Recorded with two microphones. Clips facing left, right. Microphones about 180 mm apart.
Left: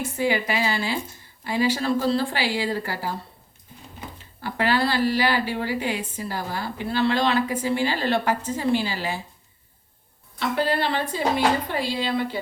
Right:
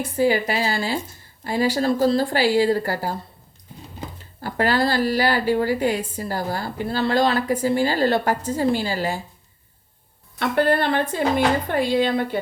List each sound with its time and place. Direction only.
0.2 s a woman's voice: 40° right (ahead or behind)
4.4 s a woman's voice: 45° right (ahead or behind)
10.4 s a woman's voice: 55° right (ahead or behind)